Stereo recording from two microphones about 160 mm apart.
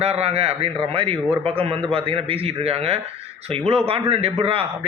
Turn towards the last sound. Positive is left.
turn(degrees=-35)  # may be behind; listen again after turning